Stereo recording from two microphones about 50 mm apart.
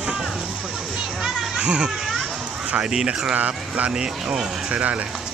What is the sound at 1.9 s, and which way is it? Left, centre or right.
A child's voice, centre.